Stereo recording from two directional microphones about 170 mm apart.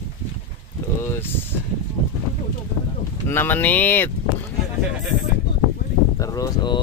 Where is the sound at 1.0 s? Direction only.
15° left (ahead or behind).